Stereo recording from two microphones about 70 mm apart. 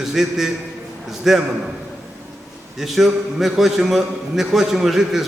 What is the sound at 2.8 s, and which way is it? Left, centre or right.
A man's voice, centre.